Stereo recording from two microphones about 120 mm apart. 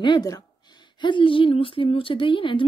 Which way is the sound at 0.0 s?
35° left (ahead or behind).